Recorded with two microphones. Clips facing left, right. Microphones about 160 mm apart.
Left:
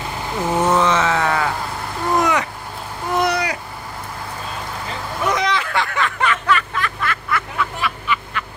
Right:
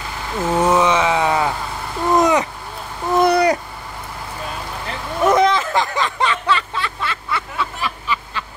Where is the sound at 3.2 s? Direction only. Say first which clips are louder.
Right 8 dB; 35° right (ahead or behind).